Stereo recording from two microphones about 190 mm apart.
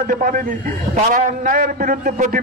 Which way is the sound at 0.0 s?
45° right (ahead or behind).